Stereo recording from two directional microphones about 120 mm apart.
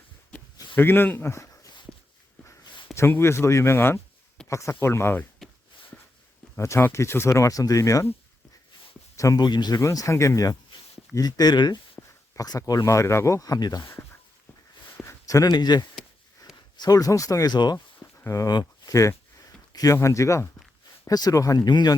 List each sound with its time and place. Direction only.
0.8 s speech: 15° left (ahead or behind)
2.9 s speech: 20° left (ahead or behind)
5.4 s a sound: centre (ahead or behind)
6.6 s speech: 20° left (ahead or behind)
9.1 s speech: 30° left (ahead or behind)
14.9 s a sound: 30° left (ahead or behind)
16.7 s speech: 30° left (ahead or behind)